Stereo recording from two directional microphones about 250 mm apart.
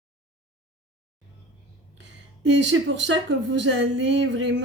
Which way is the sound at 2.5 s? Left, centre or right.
Right.